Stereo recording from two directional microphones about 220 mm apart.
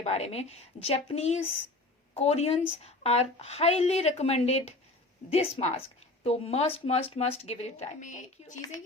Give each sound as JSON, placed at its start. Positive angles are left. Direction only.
{"t": 0.0, "sound": "a woman's voice", "side_deg": 30}